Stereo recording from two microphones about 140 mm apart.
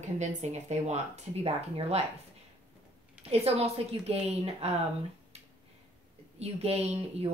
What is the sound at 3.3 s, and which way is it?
A woman's voice, 45° right (ahead or behind).